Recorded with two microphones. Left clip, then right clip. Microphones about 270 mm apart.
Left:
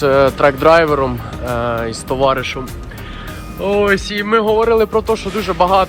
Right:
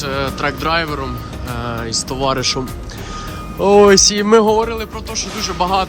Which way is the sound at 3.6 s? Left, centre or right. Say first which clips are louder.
Right 6 dB; centre.